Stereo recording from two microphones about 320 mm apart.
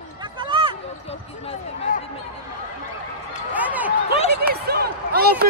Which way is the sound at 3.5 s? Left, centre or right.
Centre.